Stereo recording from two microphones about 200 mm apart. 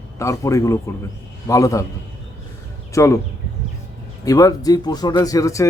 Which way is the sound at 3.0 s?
15° left (ahead or behind).